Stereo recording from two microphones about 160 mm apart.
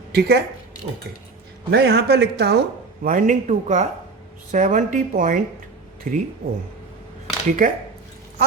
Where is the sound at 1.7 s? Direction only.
90° right.